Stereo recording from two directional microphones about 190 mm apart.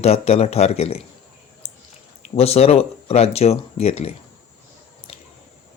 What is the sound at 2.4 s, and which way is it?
A man's voice, 35° left (ahead or behind).